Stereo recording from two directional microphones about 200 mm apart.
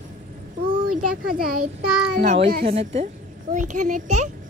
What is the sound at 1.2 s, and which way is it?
A child's voice, 45° right (ahead or behind).